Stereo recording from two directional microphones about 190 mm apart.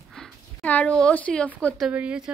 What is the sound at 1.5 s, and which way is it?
Speech, 5° left (ahead or behind).